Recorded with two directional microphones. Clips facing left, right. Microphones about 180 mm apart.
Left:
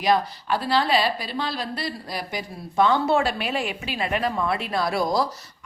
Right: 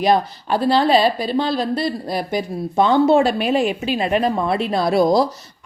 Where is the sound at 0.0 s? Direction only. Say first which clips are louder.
Right 5 dB; 25° right (ahead or behind).